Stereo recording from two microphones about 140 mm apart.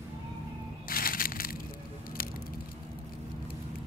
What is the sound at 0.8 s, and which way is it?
Crushing, 90° left.